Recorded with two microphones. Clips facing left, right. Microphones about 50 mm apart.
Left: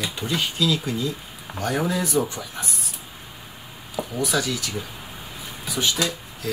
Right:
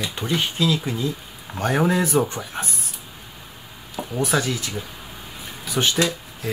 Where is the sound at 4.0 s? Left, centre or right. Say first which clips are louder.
Right 2 dB; right.